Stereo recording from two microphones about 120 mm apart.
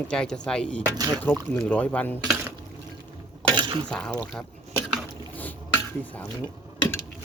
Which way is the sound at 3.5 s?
40° right (ahead or behind).